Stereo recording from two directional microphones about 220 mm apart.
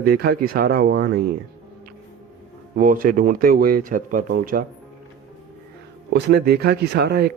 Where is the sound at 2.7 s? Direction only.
35° right (ahead or behind).